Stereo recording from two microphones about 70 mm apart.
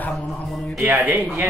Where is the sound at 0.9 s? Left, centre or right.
Right.